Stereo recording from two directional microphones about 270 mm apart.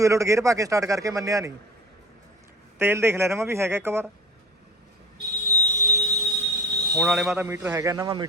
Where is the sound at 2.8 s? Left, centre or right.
Centre.